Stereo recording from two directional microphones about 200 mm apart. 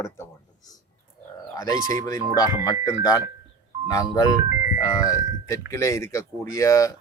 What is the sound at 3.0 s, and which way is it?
Speech, 15° left (ahead or behind).